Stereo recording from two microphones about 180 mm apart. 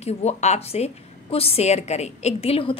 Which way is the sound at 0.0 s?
35° left (ahead or behind).